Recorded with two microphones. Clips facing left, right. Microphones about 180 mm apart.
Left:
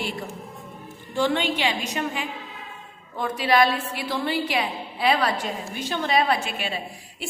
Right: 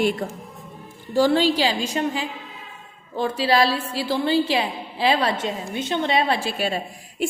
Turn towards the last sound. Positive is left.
turn(degrees=-45)  # may be behind; listen again after turning